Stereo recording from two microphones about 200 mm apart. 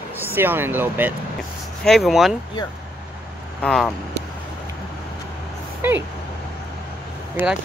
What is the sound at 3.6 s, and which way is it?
Speech, 5° left (ahead or behind).